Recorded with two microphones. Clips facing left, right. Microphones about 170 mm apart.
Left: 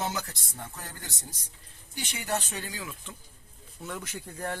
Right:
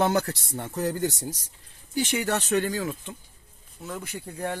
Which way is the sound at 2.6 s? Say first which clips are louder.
Right 11 dB; 45° right (ahead or behind).